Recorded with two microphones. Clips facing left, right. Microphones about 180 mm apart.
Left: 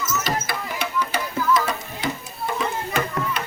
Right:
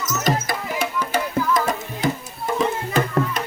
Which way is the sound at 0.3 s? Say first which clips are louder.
Right 4 dB; 45° right (ahead or behind).